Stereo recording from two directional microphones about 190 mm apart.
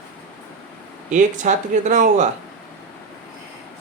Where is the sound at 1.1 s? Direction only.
40° right (ahead or behind).